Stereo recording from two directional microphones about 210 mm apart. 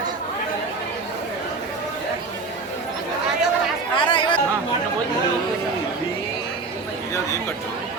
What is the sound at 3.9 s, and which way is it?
Chatter, 25° left (ahead or behind).